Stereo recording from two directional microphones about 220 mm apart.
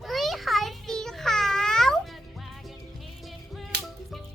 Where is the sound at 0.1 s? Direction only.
Centre (ahead or behind).